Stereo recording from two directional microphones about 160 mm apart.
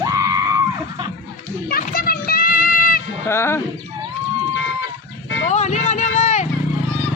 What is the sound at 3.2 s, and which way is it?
Speech, 15° left (ahead or behind).